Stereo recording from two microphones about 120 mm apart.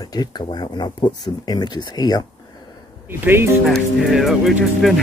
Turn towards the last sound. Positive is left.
turn(degrees=0)  # may be behind; listen again after turning